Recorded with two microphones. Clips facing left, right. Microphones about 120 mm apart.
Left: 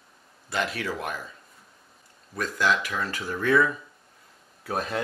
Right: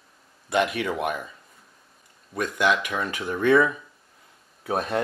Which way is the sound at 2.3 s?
20° right (ahead or behind).